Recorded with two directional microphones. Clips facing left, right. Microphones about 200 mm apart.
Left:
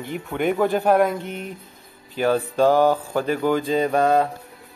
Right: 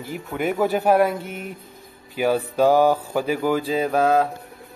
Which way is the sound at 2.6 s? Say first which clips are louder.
Right 1 dB; 10° right (ahead or behind).